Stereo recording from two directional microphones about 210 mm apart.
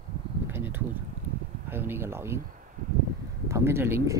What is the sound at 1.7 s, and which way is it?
Speech, 10° right (ahead or behind).